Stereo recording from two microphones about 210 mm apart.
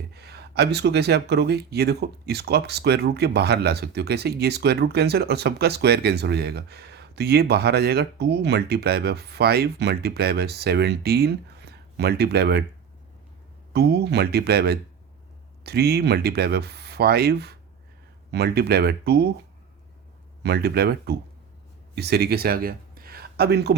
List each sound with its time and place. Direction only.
0.1 s speech: 50° right (ahead or behind)
13.7 s speech: 50° right (ahead or behind)
20.4 s speech: 50° right (ahead or behind)